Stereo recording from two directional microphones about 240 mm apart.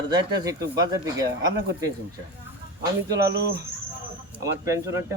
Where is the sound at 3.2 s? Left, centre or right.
Right.